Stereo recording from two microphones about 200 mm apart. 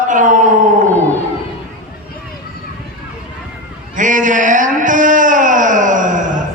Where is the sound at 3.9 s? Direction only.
40° right (ahead or behind).